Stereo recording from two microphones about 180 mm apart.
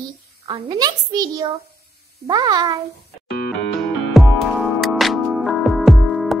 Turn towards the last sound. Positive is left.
turn(degrees=0)  # may be behind; listen again after turning